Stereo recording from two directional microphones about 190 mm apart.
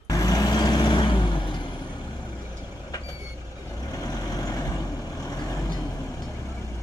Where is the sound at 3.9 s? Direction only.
20° left (ahead or behind).